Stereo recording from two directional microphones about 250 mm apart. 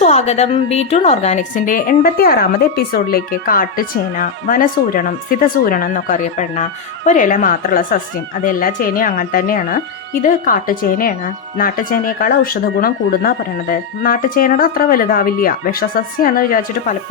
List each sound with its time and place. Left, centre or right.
0.0 s a woman's voice: left